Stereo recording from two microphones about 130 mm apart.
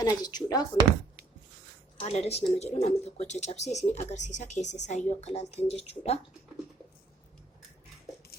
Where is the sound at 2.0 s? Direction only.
55° left (ahead or behind).